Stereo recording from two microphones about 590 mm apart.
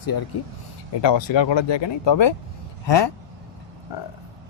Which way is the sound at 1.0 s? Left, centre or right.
Left.